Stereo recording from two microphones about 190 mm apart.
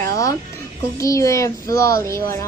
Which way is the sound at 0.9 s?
15° left (ahead or behind).